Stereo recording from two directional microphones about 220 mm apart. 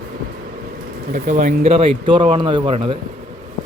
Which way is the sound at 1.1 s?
35° right (ahead or behind).